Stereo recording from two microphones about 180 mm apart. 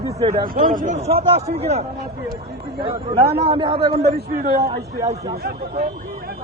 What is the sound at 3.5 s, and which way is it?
Speech, 30° right (ahead or behind).